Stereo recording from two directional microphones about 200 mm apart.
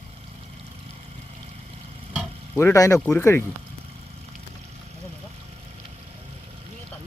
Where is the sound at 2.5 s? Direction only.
15° left (ahead or behind).